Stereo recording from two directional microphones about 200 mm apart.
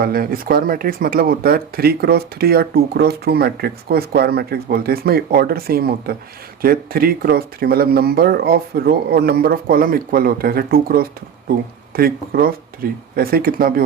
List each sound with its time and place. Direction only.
0.0 s speech: 45° right (ahead or behind)